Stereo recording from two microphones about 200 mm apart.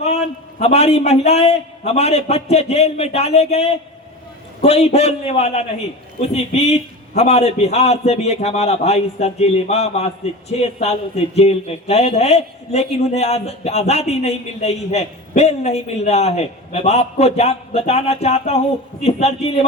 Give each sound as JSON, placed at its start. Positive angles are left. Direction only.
{"t": 0.0, "sound": "a man's voice", "side_deg": 30}